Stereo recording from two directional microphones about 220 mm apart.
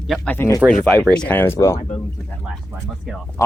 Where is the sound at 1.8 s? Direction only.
30° left (ahead or behind).